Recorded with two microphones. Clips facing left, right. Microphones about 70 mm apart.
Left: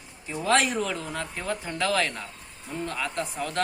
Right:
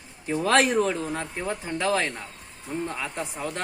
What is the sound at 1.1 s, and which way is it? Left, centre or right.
Speech, right.